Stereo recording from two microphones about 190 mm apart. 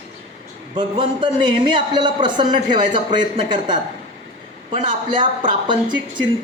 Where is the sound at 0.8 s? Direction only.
25° right (ahead or behind).